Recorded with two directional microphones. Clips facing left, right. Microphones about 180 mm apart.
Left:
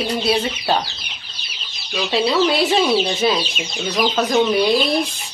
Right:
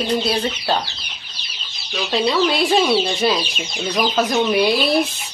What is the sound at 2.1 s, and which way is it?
Speech, 5° left (ahead or behind).